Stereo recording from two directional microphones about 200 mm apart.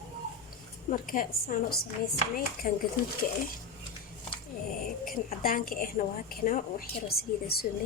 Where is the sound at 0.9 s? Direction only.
40° left (ahead or behind).